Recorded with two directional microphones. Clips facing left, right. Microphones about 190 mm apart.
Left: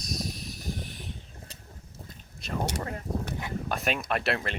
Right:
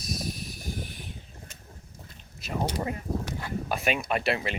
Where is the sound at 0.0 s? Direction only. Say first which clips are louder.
Right 1 dB; centre (ahead or behind).